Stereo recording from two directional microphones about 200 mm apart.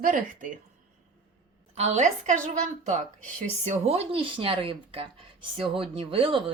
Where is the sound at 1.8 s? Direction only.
35° right (ahead or behind).